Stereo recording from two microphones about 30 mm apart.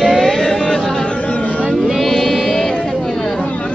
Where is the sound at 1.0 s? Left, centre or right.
Left.